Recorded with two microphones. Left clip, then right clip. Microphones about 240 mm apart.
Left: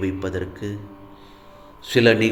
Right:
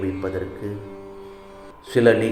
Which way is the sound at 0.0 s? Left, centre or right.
Left.